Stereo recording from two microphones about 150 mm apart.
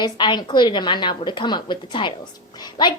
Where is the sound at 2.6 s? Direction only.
30° left (ahead or behind).